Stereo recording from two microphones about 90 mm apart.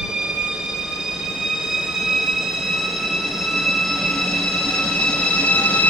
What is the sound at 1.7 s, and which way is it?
Train, 5° right (ahead or behind).